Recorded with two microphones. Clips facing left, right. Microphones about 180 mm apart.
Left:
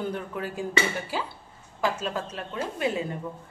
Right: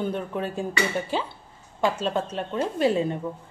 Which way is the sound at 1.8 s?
25° right (ahead or behind).